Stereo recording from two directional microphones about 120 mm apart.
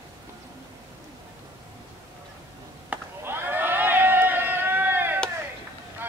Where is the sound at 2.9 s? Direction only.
20° right (ahead or behind).